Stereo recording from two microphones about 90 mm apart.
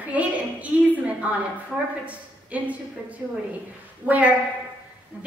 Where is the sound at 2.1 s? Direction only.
15° right (ahead or behind).